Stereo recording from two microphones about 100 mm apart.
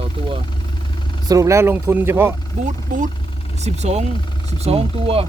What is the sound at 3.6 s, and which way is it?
Speech, 90° right.